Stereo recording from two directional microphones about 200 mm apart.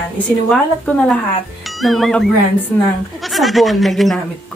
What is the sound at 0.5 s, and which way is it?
A woman's voice, 5° left (ahead or behind).